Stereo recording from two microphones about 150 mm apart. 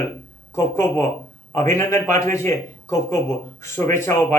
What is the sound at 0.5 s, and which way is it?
Speech, 20° left (ahead or behind).